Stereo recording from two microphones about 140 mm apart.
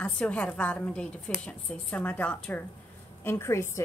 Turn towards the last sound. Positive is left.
turn(degrees=20)  # may be behind; listen again after turning